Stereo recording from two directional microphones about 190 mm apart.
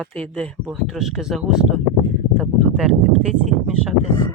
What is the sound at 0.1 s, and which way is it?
Speech, 5° left (ahead or behind).